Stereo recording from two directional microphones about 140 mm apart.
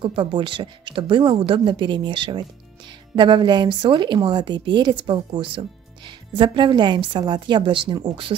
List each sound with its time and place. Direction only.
0.0 s a woman's voice: 35° right (ahead or behind)